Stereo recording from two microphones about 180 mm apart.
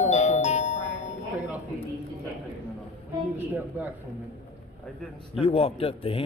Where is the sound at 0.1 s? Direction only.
40° left (ahead or behind).